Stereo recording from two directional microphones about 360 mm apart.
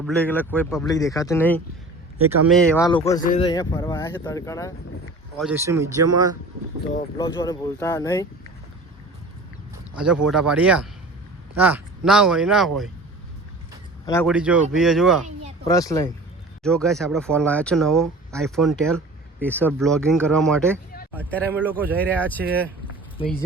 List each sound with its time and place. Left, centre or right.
0.0 s speech: centre
5.4 s speech: centre
7.2 s speech: centre
9.9 s speech: centre
14.1 s speech: centre
23.1 s speech: left